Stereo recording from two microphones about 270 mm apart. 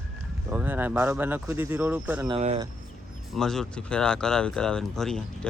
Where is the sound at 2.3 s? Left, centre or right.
Right.